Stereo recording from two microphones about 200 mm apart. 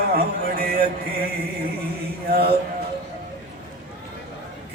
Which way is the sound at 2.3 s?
50° right (ahead or behind).